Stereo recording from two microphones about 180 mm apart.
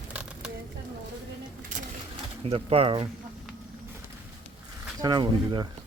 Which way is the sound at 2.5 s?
30° right (ahead or behind).